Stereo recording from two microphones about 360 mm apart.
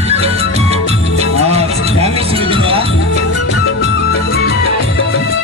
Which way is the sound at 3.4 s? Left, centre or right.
Left.